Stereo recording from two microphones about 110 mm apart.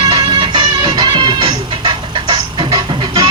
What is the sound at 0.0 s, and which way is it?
Music, 40° right (ahead or behind).